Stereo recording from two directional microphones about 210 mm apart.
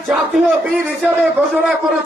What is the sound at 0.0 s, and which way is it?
A man's voice, centre (ahead or behind).